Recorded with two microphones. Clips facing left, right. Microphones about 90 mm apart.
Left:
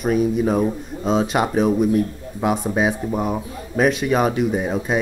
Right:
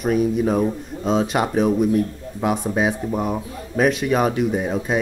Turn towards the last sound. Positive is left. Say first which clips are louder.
# even
turn(degrees=10)  # may be behind; listen again after turning